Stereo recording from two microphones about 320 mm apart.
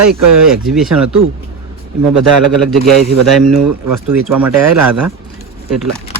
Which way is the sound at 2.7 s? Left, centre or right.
Centre.